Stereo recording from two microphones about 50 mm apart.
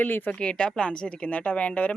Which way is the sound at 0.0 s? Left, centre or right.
Left.